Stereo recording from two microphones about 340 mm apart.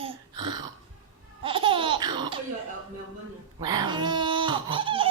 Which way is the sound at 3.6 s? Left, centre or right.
Centre.